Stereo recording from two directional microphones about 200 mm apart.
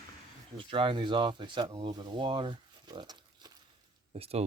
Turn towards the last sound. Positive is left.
turn(degrees=-30)  # may be behind; listen again after turning